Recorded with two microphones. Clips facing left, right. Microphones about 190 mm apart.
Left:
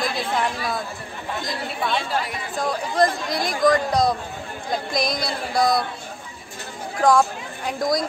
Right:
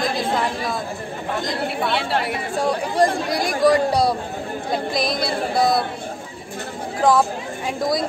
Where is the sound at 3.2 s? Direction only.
10° right (ahead or behind).